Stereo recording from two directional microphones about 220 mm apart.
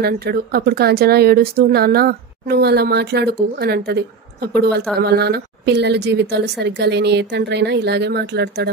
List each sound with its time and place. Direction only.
0.0 s speech: 45° right (ahead or behind)